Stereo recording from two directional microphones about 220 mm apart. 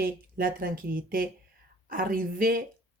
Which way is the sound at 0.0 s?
40° right (ahead or behind).